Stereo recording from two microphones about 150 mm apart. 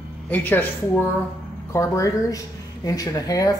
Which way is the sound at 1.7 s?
20° left (ahead or behind).